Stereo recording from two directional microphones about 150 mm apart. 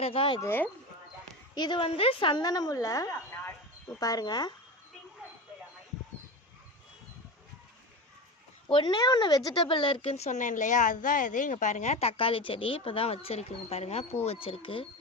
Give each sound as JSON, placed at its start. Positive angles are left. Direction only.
{"t": 0.0, "sound": "speech", "side_deg": 40}
{"t": 0.3, "sound": "speech", "side_deg": 15}
{"t": 1.5, "sound": "a woman's voice", "side_deg": 30}
{"t": 8.7, "sound": "speech", "side_deg": 30}